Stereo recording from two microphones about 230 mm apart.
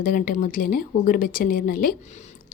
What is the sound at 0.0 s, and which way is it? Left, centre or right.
Speech, left.